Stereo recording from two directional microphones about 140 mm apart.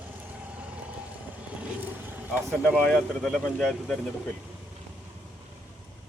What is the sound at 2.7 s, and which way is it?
Speech, 5° left (ahead or behind).